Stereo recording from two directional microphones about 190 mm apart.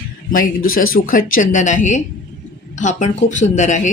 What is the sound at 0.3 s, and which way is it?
A woman's voice, 50° left (ahead or behind).